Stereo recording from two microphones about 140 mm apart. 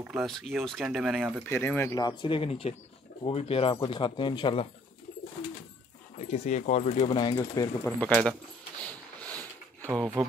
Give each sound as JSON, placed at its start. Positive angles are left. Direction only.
{"t": 0.0, "sound": "speech", "side_deg": -5}
{"t": 1.5, "sound": "speech", "side_deg": 15}
{"t": 2.0, "sound": "speech", "side_deg": 35}
{"t": 6.1, "sound": "speech", "side_deg": 55}
{"t": 7.3, "sound": "speech", "side_deg": 25}
{"t": 7.8, "sound": "speech", "side_deg": 5}
{"t": 8.8, "sound": "a sound", "side_deg": 10}
{"t": 9.8, "sound": "speech", "side_deg": -10}